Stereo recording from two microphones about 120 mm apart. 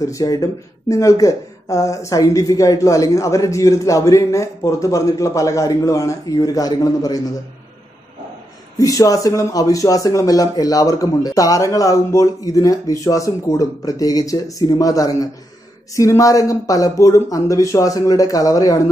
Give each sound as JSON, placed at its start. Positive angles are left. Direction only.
{"t": 0.0, "sound": "speech", "side_deg": 30}
{"t": 8.7, "sound": "speech", "side_deg": 30}